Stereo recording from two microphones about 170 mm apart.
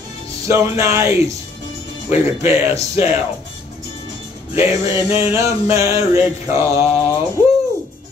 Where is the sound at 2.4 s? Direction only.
15° right (ahead or behind).